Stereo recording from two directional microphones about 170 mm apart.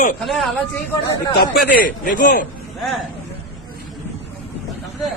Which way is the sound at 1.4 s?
55° left (ahead or behind).